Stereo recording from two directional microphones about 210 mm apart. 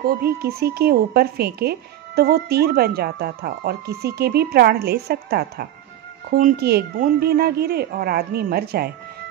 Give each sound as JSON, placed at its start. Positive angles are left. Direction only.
{"t": 0.0, "sound": "speech", "side_deg": -45}